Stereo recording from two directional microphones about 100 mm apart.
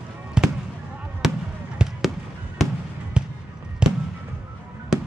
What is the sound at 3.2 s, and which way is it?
Fireworks, 10° right (ahead or behind).